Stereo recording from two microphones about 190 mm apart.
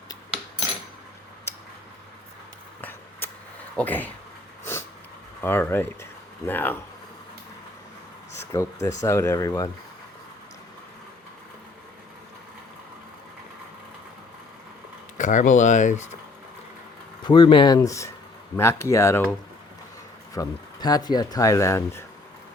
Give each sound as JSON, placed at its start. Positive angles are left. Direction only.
{"t": 3.2, "sound": "a sound", "side_deg": 10}
{"t": 3.8, "sound": "speech", "side_deg": 10}
{"t": 5.4, "sound": "speech", "side_deg": 10}
{"t": 8.5, "sound": "speech", "side_deg": 15}
{"t": 15.2, "sound": "speech", "side_deg": 40}
{"t": 17.2, "sound": "speech", "side_deg": 25}
{"t": 20.3, "sound": "speech", "side_deg": 20}